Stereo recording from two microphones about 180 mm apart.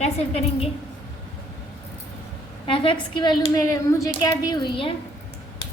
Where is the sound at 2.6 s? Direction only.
30° left (ahead or behind).